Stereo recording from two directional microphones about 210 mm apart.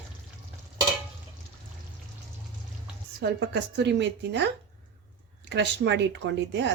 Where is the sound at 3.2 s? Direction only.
55° right (ahead or behind).